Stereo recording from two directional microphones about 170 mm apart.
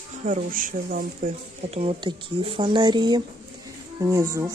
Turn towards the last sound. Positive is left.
turn(degrees=-20)  # may be behind; listen again after turning